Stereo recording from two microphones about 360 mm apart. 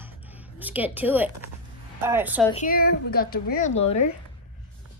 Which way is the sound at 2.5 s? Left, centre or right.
Left.